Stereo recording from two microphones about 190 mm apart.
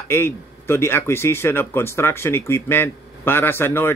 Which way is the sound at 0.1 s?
15° left (ahead or behind).